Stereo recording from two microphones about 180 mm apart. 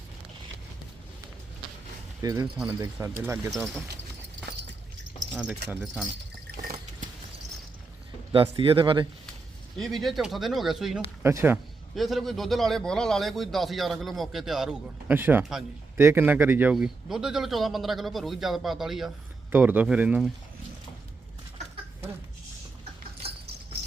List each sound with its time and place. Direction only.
2.2 s speech: 20° right (ahead or behind)
3.3 s a man's voice: centre (ahead or behind)
5.6 s a man's voice: 5° right (ahead or behind)
8.3 s speech: 30° right (ahead or behind)
9.7 s a man's voice: centre (ahead or behind)
11.2 s speech: 15° right (ahead or behind)
11.9 s a man's voice: centre (ahead or behind)